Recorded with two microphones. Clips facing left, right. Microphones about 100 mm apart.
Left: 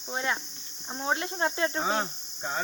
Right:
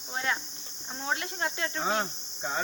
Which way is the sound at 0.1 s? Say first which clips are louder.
Left 1 dB; 20° left (ahead or behind).